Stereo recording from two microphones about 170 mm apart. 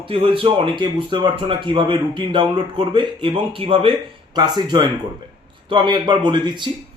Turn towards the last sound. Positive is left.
turn(degrees=-25)  # may be behind; listen again after turning